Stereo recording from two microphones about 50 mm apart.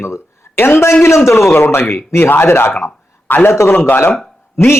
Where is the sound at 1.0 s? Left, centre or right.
Left.